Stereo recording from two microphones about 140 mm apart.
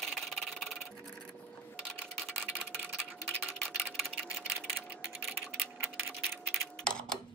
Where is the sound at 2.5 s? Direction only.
15° right (ahead or behind).